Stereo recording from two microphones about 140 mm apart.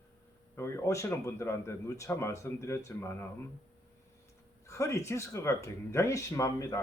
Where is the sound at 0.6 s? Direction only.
20° left (ahead or behind).